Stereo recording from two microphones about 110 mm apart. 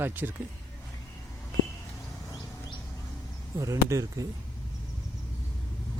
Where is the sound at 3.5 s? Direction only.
30° right (ahead or behind).